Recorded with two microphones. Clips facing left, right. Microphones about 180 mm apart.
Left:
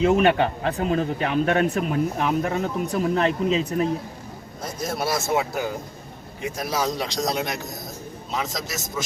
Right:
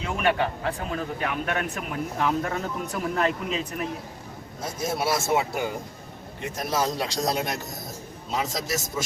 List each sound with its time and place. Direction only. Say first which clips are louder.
0.1 s speech: left 6 dB; 25° left (ahead or behind)
4.6 s a man's voice: even; 5° right (ahead or behind)
5.0 s speech: left 1 dB; 25° right (ahead or behind)
5.3 s a man's voice: left 1 dB; centre (ahead or behind)